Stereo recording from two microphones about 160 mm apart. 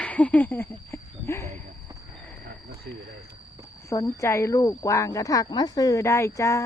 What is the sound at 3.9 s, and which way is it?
Speech, 20° left (ahead or behind).